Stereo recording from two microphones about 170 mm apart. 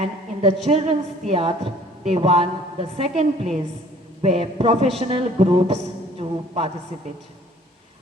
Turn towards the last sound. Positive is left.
turn(degrees=-35)  # may be behind; listen again after turning